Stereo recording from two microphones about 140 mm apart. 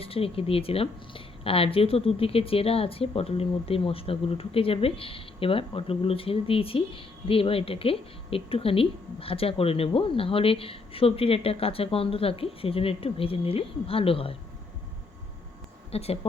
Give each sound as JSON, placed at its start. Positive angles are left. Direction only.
{"t": 0.0, "sound": "speech", "side_deg": 40}
{"t": 15.9, "sound": "a woman's voice", "side_deg": 45}